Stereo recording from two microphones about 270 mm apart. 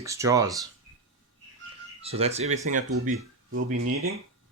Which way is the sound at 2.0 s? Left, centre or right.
Right.